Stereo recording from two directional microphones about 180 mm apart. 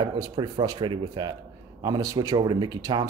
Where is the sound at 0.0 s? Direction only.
20° right (ahead or behind).